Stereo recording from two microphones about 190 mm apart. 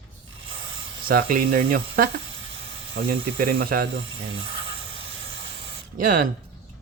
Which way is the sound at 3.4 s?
50° right (ahead or behind).